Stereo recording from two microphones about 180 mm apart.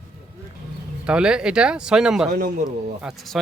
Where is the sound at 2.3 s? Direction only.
50° right (ahead or behind).